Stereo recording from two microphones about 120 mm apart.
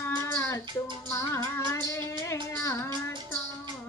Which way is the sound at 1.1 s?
25° left (ahead or behind).